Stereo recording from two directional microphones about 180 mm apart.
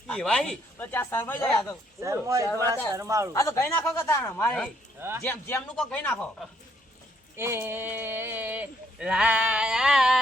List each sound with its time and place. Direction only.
0.1 s speech: 5° left (ahead or behind)
2.0 s speech: 15° right (ahead or behind)
3.3 s speech: 15° left (ahead or behind)
4.9 s speech: 10° right (ahead or behind)
5.2 s speech: 10° left (ahead or behind)
7.3 s speech: 15° right (ahead or behind)